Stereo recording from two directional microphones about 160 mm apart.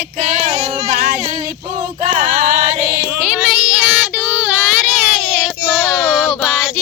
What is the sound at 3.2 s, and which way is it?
Child singing, 5° right (ahead or behind).